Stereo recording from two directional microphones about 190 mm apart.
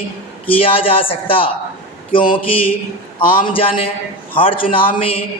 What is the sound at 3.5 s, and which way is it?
Speech, 25° left (ahead or behind).